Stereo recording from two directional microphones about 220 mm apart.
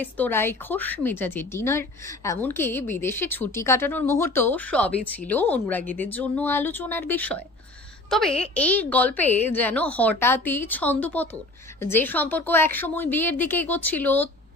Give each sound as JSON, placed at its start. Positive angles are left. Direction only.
{"t": 0.0, "sound": "a woman's voice", "side_deg": 10}